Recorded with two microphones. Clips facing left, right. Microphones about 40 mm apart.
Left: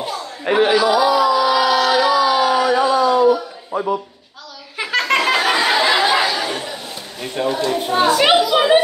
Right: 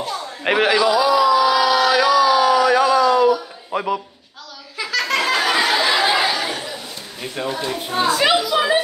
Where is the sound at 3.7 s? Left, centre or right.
Right.